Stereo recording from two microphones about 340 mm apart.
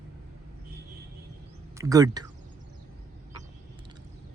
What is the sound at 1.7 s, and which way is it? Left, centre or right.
Speech, centre.